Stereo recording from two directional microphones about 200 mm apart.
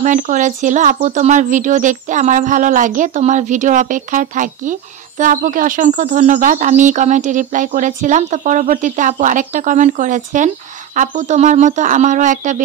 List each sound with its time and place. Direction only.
0.0 s speech: 40° right (ahead or behind)